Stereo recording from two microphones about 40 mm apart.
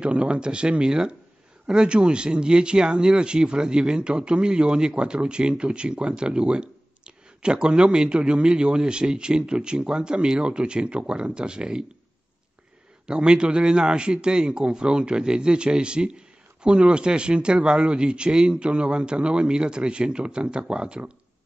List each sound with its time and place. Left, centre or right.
0.0 s speech: right
13.0 s speech: right